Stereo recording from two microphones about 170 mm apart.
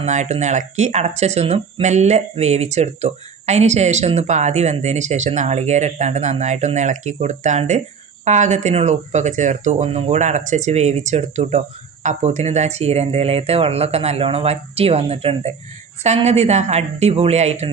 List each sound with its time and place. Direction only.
0.0 s speech: 45° right (ahead or behind)